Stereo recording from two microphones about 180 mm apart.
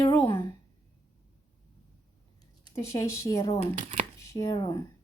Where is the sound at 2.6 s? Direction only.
15° left (ahead or behind).